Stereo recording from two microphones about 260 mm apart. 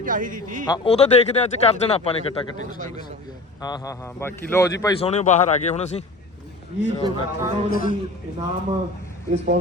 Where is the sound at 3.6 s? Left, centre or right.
Centre.